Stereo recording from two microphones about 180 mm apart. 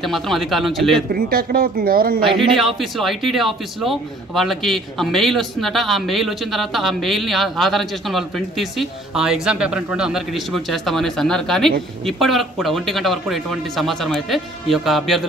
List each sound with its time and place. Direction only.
0.0 s a man's voice: centre (ahead or behind)
1.1 s speech: 55° right (ahead or behind)
2.5 s a man's voice: centre (ahead or behind)